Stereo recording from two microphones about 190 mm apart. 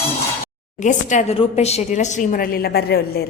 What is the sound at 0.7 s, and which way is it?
A woman's voice, 40° left (ahead or behind).